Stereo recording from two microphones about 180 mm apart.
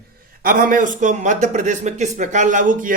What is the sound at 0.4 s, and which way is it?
Speech, 50° right (ahead or behind).